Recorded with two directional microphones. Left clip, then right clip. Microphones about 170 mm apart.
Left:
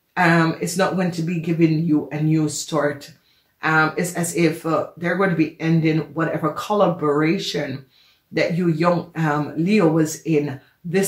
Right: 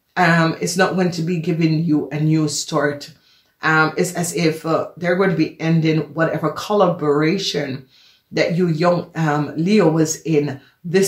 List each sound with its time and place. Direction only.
0.1 s speech: 35° right (ahead or behind)